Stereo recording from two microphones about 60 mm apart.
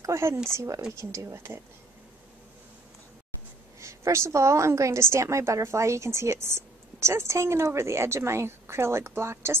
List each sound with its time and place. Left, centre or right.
0.0 s a woman's voice: right
3.8 s a woman's voice: right